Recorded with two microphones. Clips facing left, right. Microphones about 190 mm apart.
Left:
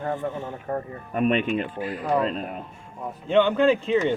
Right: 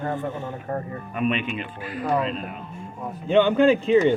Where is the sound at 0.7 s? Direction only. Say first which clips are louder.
Left 1 dB; 10° left (ahead or behind).